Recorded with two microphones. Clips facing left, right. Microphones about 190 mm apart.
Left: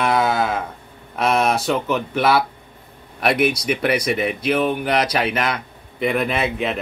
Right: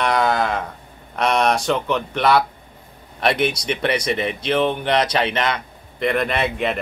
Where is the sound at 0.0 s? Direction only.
5° left (ahead or behind).